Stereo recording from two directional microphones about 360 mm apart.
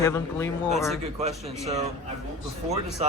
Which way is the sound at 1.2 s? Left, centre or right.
Centre.